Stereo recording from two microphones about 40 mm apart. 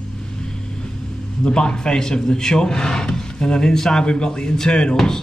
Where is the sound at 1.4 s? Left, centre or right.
Left.